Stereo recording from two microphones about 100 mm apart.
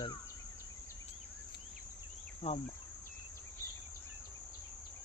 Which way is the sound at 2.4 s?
90° left.